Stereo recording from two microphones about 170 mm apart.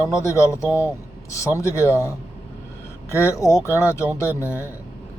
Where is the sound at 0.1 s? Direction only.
15° left (ahead or behind).